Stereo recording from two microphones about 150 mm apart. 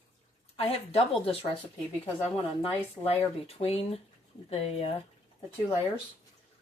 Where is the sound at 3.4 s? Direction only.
40° left (ahead or behind).